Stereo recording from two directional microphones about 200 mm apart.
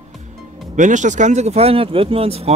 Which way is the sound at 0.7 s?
40° right (ahead or behind).